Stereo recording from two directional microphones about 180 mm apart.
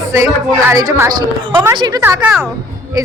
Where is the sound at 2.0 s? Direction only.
10° right (ahead or behind).